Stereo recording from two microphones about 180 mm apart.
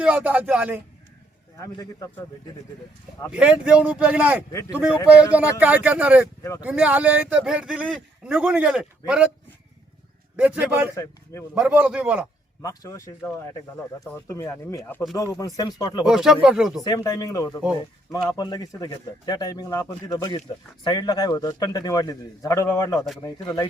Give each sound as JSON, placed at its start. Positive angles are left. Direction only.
{"t": 0.0, "sound": "speech", "side_deg": -5}
{"t": 1.5, "sound": "speech", "side_deg": 20}
{"t": 3.3, "sound": "speech", "side_deg": -5}
{"t": 10.3, "sound": "speech", "side_deg": -10}
{"t": 12.6, "sound": "speech", "side_deg": 20}
{"t": 14.0, "sound": "a man's voice", "side_deg": 15}
{"t": 16.0, "sound": "speech", "side_deg": -5}
{"t": 16.8, "sound": "a man's voice", "side_deg": 20}